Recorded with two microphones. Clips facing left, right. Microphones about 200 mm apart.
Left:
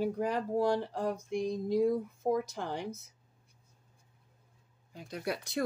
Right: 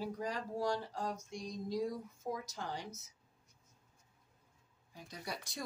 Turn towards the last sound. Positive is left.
turn(degrees=60)  # may be behind; listen again after turning